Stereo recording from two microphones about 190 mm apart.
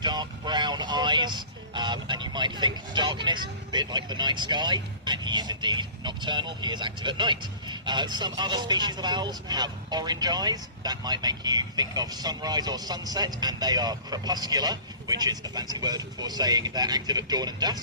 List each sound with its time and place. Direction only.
0.0 s speech: 20° right (ahead or behind)